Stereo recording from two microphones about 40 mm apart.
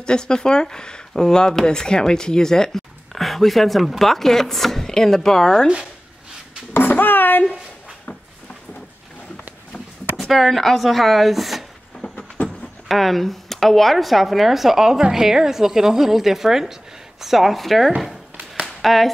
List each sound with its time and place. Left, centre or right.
0.0 s speech: centre
3.2 s speech: centre
6.7 s a sound: left
10.1 s speech: centre
12.0 s a sound: left
12.8 s speech: centre